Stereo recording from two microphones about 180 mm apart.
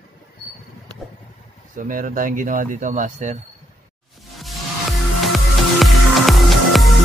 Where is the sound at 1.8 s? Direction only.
50° right (ahead or behind).